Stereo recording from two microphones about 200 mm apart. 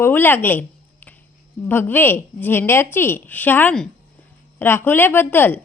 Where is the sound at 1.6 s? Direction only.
10° left (ahead or behind).